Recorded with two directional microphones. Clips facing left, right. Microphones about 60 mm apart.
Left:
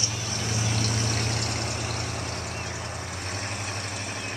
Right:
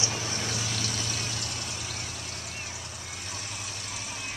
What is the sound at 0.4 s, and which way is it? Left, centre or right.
Vehicle, left.